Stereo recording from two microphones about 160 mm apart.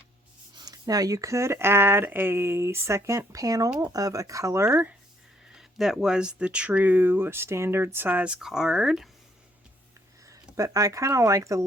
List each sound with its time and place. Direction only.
0.5 s speech: 25° right (ahead or behind)
5.5 s speech: 5° right (ahead or behind)
10.2 s speech: 20° right (ahead or behind)